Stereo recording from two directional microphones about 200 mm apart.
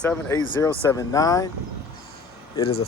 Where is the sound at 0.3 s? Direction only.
15° left (ahead or behind).